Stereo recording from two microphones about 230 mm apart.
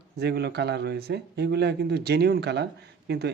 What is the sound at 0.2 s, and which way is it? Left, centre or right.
Speech, right.